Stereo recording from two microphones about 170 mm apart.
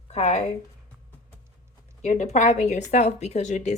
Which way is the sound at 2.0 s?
45° left (ahead or behind).